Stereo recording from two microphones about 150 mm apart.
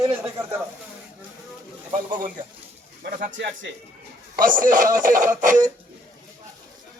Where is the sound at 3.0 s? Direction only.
65° right (ahead or behind).